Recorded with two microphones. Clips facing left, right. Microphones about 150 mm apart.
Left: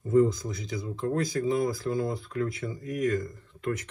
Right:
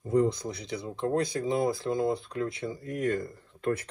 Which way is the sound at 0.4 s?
25° right (ahead or behind).